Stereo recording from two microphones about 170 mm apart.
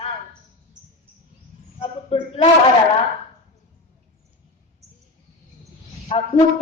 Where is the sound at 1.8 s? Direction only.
35° left (ahead or behind).